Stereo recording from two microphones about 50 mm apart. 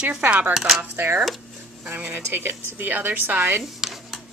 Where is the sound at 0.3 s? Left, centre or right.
Right.